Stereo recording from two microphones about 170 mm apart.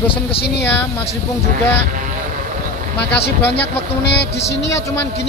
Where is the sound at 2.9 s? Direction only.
80° left.